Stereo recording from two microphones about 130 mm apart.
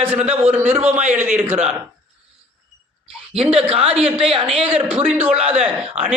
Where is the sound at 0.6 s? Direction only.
55° right (ahead or behind).